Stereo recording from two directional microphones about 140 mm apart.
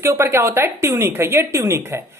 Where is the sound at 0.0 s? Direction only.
15° right (ahead or behind).